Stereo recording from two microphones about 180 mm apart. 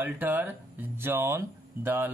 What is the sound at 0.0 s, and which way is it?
A man's voice, 10° right (ahead or behind).